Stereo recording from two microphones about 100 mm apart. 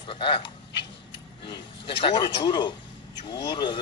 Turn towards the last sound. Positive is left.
turn(degrees=50)  # may be behind; listen again after turning